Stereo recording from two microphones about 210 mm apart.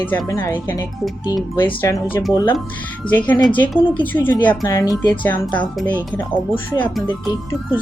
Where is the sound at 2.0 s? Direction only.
10° left (ahead or behind).